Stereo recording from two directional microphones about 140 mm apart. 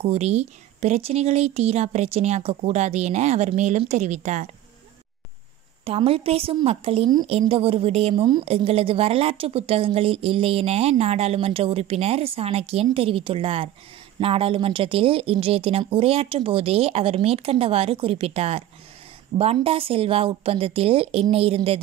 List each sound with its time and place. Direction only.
0.0 s a woman's voice: 45° right (ahead or behind)
5.9 s a woman's voice: 40° right (ahead or behind)